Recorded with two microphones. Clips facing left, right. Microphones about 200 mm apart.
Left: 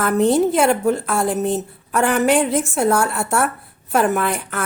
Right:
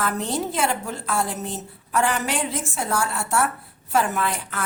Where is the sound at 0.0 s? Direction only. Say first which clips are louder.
Left 10 dB; 55° left (ahead or behind).